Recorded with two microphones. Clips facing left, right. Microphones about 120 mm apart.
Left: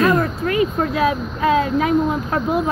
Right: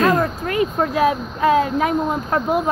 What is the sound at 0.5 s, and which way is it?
Speech, 40° right (ahead or behind).